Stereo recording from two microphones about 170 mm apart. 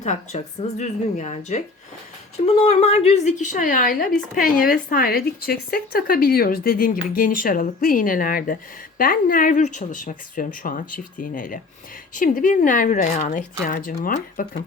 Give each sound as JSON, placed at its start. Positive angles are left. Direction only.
{"t": 0.0, "sound": "a woman's voice", "side_deg": 45}